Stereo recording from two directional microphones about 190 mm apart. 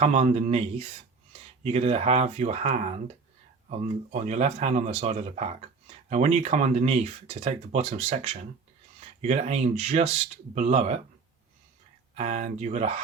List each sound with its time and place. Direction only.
0.0 s speech: 35° right (ahead or behind)
12.1 s speech: 35° right (ahead or behind)